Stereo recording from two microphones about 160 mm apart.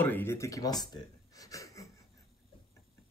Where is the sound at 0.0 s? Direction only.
15° left (ahead or behind).